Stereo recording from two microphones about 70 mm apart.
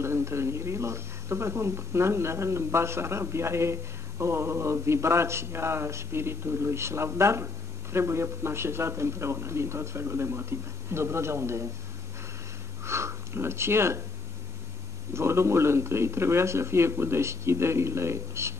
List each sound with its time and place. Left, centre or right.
0.0 s speech: right
12.8 s speech: right
15.1 s speech: right